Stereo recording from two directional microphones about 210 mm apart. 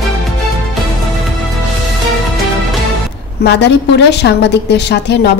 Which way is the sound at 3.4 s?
55° left (ahead or behind).